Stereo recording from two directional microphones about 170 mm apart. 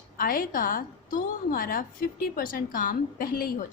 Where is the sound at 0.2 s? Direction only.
55° left (ahead or behind).